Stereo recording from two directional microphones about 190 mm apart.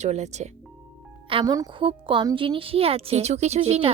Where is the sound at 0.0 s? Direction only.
35° right (ahead or behind).